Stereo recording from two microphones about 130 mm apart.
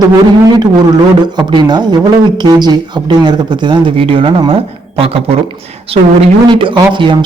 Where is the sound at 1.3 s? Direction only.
35° right (ahead or behind).